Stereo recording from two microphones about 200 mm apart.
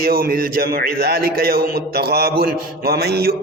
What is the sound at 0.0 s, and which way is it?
A man's voice, 45° right (ahead or behind).